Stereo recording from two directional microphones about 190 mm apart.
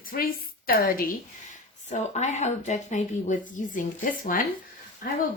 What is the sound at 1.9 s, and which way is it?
Speech, 35° left (ahead or behind).